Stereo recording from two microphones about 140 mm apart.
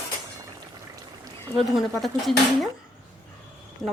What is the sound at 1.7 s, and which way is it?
Speech, centre (ahead or behind).